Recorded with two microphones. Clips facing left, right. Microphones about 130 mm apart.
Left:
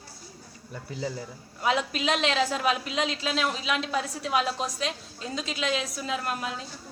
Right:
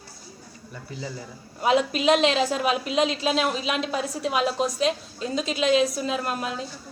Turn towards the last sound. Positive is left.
turn(degrees=-25)  # may be behind; listen again after turning